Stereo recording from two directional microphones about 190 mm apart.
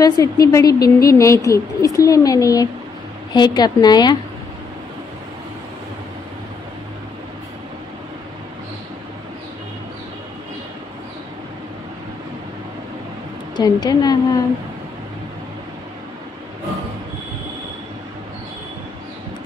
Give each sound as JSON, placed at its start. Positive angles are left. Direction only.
{"t": 0.0, "sound": "a woman's voice", "side_deg": 20}
{"t": 13.6, "sound": "a woman's voice", "side_deg": 20}